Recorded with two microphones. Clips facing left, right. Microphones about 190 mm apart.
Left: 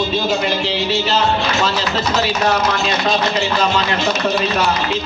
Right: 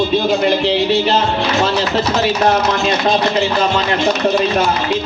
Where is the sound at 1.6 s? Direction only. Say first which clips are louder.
Right 3 dB; 55° right (ahead or behind).